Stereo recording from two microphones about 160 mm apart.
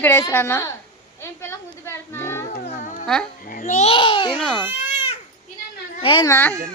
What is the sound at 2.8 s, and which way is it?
Dog, 50° left (ahead or behind).